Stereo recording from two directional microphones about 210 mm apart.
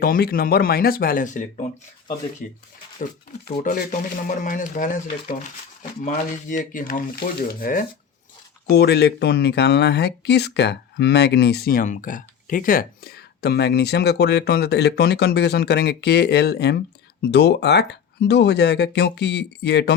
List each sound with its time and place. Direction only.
0.0 s speech: 45° left (ahead or behind)
3.6 s speech: 40° left (ahead or behind)
6.1 s speech: 40° left (ahead or behind)